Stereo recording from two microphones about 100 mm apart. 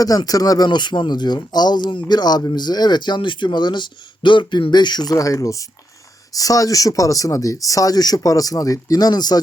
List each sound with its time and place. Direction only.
0.0 s speech: 40° left (ahead or behind)
5.1 s speech: 35° left (ahead or behind)